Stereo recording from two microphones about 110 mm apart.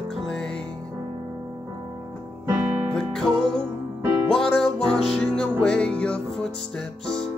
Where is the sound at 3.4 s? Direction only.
50° right (ahead or behind).